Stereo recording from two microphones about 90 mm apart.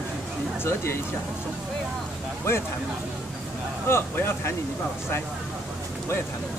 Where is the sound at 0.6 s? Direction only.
30° left (ahead or behind).